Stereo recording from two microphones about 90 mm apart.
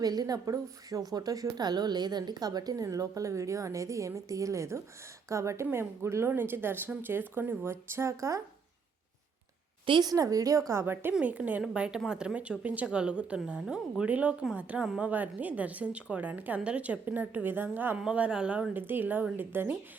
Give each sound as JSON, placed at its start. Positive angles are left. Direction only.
{"t": 0.0, "sound": "a woman's voice", "side_deg": -45}
{"t": 10.0, "sound": "a woman's voice", "side_deg": -40}
{"t": 10.7, "sound": "a woman's voice", "side_deg": -25}
{"t": 11.1, "sound": "a woman's voice", "side_deg": -15}
{"t": 17.9, "sound": "speech", "side_deg": -10}